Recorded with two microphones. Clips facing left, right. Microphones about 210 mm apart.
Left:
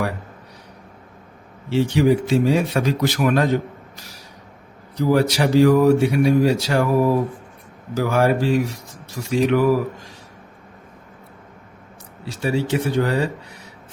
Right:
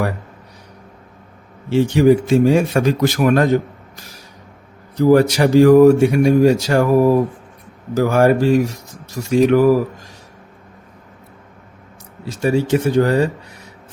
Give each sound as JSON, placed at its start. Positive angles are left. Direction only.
{"t": 1.7, "sound": "speech", "side_deg": -50}
{"t": 4.9, "sound": "speech", "side_deg": -50}
{"t": 12.2, "sound": "speech", "side_deg": -45}